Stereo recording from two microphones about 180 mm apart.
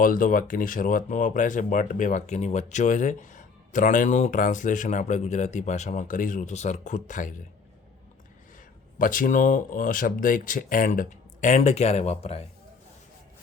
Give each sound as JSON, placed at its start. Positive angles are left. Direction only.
{"t": 0.0, "sound": "speech", "side_deg": 50}
{"t": 9.0, "sound": "speech", "side_deg": 50}